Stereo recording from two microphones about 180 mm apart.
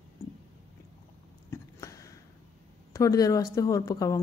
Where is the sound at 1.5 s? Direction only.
15° left (ahead or behind).